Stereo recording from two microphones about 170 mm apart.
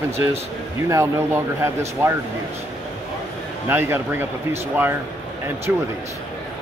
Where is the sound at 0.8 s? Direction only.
15° right (ahead or behind).